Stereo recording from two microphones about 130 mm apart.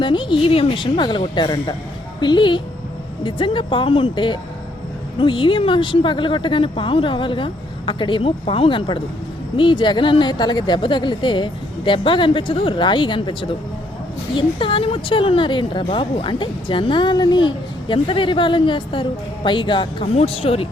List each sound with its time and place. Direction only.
0.0 s a woman's voice: 40° left (ahead or behind)